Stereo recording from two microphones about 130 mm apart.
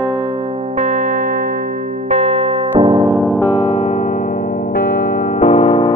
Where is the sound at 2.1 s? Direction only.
60° right (ahead or behind).